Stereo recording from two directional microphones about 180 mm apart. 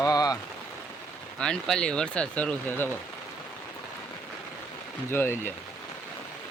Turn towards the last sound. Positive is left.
turn(degrees=10)  # may be behind; listen again after turning